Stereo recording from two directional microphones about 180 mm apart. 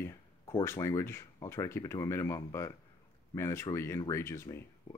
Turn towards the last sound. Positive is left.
turn(degrees=15)  # may be behind; listen again after turning